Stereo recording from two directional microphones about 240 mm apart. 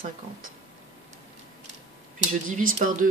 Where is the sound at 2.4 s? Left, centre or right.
Right.